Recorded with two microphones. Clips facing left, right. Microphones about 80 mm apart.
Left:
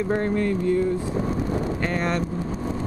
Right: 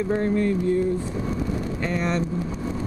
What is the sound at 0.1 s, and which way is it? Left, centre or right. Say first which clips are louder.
Speech: right 1 dB; left.